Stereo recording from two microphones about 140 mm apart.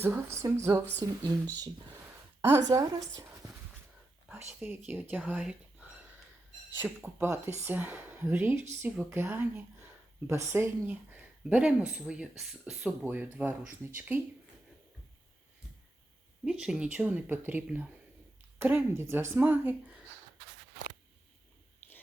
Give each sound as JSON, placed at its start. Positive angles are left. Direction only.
{"t": 0.0, "sound": "speech", "side_deg": -15}
{"t": 2.4, "sound": "speech", "side_deg": -25}
{"t": 4.3, "sound": "speech", "side_deg": -15}
{"t": 16.4, "sound": "speech", "side_deg": -5}